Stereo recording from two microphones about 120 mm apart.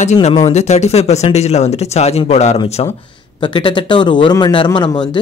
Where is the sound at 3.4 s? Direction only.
40° left (ahead or behind).